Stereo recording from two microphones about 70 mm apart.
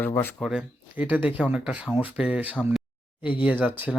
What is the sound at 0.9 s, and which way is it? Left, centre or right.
Speech, right.